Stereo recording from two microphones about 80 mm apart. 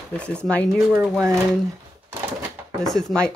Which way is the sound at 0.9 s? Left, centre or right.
Right.